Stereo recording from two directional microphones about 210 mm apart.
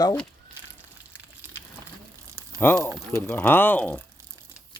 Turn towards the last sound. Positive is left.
turn(degrees=5)  # may be behind; listen again after turning